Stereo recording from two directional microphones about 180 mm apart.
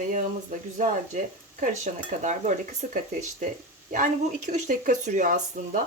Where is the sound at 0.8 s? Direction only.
45° right (ahead or behind).